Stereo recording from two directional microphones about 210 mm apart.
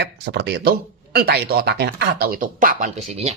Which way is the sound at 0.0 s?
55° right (ahead or behind).